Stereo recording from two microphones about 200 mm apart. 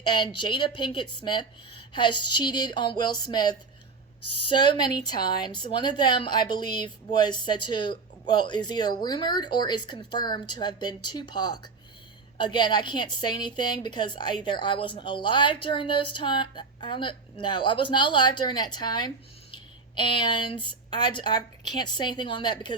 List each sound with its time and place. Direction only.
0.0 s a woman's voice: 20° left (ahead or behind)